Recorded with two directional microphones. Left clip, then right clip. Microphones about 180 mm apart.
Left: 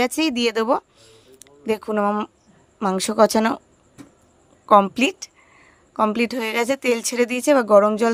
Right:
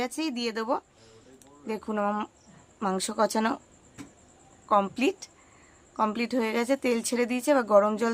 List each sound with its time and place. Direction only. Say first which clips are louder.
0.0 s speech: left 10 dB; 45° left (ahead or behind)
1.4 s a sound: left 11 dB; 40° left (ahead or behind)
1.9 s speech: left 5 dB; 30° left (ahead or behind)
4.7 s speech: left 9 dB; 35° left (ahead or behind)